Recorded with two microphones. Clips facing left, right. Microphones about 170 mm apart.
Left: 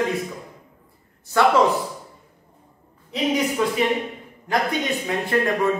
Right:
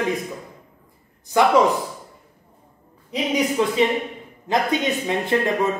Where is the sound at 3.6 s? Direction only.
25° right (ahead or behind).